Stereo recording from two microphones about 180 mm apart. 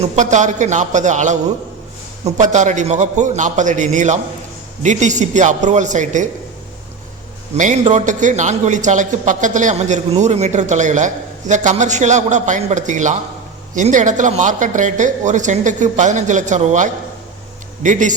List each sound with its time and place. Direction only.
0.0 s a man's voice: 40° right (ahead or behind)
7.5 s a man's voice: 40° right (ahead or behind)